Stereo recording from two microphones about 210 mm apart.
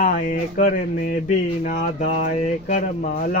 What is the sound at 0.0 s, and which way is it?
Speech, 40° left (ahead or behind).